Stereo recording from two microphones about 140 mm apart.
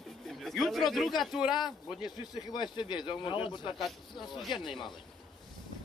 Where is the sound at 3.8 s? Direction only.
Centre (ahead or behind).